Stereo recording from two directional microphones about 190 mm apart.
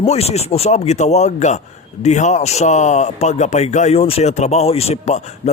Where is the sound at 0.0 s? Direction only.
35° left (ahead or behind).